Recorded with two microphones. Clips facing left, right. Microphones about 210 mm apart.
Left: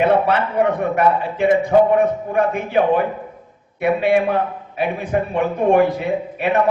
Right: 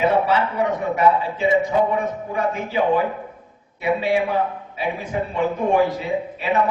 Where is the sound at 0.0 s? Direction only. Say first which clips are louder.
Left 2 dB; 60° left (ahead or behind).